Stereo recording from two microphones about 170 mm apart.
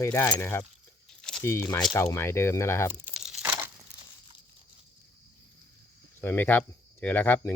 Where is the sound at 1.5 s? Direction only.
15° left (ahead or behind).